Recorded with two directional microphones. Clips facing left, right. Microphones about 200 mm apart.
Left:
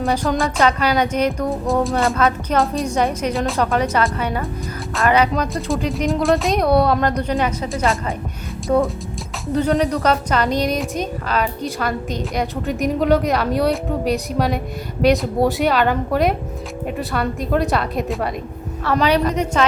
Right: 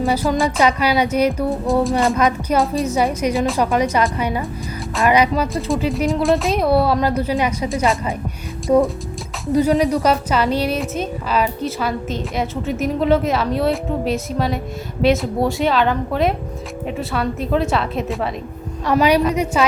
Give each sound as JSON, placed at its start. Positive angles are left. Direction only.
{"t": 0.0, "sound": "a woman's voice", "side_deg": -5}
{"t": 2.1, "sound": "a woman's voice", "side_deg": -15}
{"t": 3.7, "sound": "a woman's voice", "side_deg": -10}
{"t": 5.3, "sound": "a woman's voice", "side_deg": 0}
{"t": 7.7, "sound": "a woman's voice", "side_deg": 0}
{"t": 18.9, "sound": "a woman's voice", "side_deg": -10}